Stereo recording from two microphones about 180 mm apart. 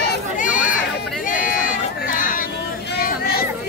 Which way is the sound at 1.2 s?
50° left (ahead or behind).